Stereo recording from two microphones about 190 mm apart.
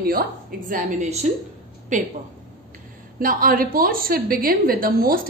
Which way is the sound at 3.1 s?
50° right (ahead or behind).